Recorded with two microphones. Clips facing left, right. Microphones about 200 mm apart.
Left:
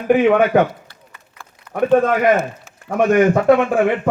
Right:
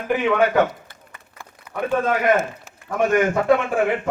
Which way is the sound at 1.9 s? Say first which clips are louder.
Left 5 dB; 50° left (ahead or behind).